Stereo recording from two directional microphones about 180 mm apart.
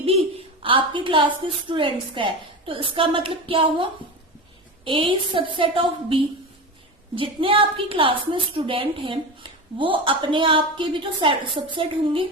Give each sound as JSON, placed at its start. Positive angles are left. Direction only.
{"t": 0.0, "sound": "a woman's voice", "side_deg": -35}
{"t": 4.9, "sound": "a woman's voice", "side_deg": -30}